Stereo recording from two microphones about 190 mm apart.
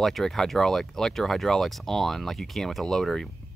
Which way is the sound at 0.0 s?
Centre (ahead or behind).